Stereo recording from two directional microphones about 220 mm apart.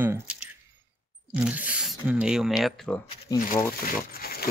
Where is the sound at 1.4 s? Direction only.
5° right (ahead or behind).